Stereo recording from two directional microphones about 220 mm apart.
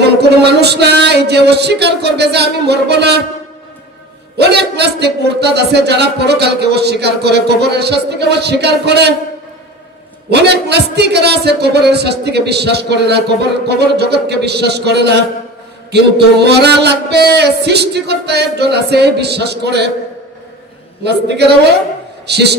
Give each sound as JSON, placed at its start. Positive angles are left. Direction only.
{"t": 0.0, "sound": "a sound", "side_deg": -50}
{"t": 4.4, "sound": "a man's voice", "side_deg": -50}
{"t": 10.3, "sound": "a man's voice", "side_deg": -50}
{"t": 21.0, "sound": "a man's voice", "side_deg": -50}